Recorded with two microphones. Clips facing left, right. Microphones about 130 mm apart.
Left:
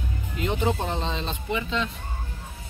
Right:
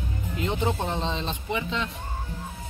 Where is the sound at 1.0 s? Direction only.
20° right (ahead or behind).